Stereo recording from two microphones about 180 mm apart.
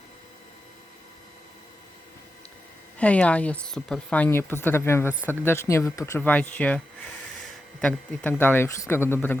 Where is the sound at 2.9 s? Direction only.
5° left (ahead or behind).